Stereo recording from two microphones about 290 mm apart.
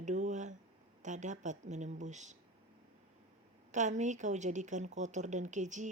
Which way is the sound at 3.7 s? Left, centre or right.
Right.